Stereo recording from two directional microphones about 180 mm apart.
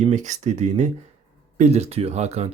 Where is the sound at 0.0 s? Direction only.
40° right (ahead or behind).